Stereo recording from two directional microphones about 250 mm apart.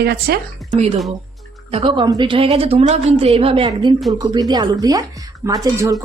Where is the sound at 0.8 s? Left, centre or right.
Right.